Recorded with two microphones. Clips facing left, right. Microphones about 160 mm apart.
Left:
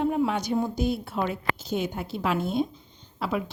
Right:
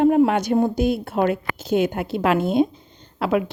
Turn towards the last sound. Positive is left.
turn(degrees=-70)  # may be behind; listen again after turning